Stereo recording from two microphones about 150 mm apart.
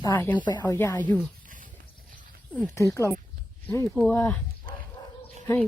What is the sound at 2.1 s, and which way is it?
Wild animals, 60° right (ahead or behind).